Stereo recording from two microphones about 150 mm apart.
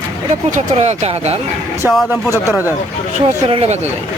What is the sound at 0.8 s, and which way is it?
Speech, 45° right (ahead or behind).